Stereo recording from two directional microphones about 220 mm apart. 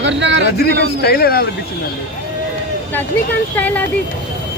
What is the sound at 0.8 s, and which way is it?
Speech, 45° left (ahead or behind).